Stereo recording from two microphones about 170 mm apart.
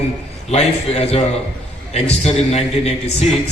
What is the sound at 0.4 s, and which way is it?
A man's voice, 40° left (ahead or behind).